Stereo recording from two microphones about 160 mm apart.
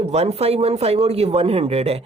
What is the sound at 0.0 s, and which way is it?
A man's voice, 40° right (ahead or behind).